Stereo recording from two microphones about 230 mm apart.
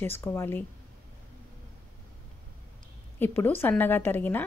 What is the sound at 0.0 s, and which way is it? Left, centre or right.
Speech, centre.